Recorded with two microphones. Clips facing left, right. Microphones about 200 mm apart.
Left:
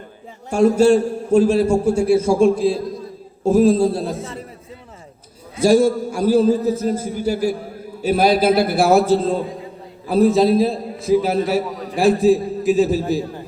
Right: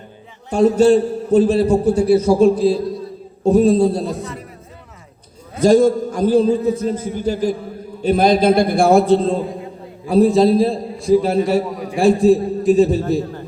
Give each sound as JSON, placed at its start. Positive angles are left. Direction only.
{"t": 0.5, "sound": "a man's voice", "side_deg": 10}
{"t": 1.9, "sound": "a man's voice", "side_deg": -35}
{"t": 3.4, "sound": "a man's voice", "side_deg": 0}
{"t": 5.5, "sound": "a man's voice", "side_deg": 10}